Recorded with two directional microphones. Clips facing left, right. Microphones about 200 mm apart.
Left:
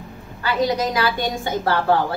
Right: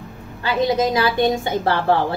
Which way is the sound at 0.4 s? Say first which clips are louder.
Right 2 dB; 25° right (ahead or behind).